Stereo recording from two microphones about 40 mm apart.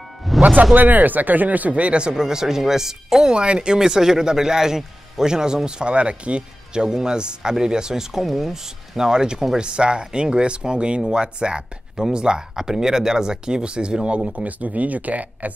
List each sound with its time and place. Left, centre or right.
0.3 s music: centre
0.7 s speech: right; by 3.3 s centre
3.3 s a man's voice: right